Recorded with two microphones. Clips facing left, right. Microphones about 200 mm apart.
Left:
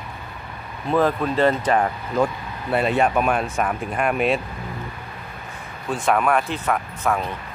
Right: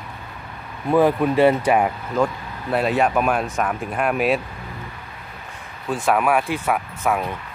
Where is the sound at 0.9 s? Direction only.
10° right (ahead or behind).